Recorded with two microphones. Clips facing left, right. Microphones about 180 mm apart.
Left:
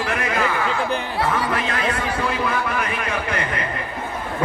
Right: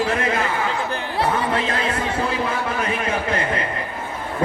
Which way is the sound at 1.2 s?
25° right (ahead or behind).